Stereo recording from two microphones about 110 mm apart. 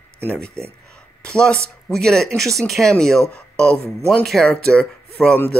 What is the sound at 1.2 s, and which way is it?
Speech, 10° left (ahead or behind).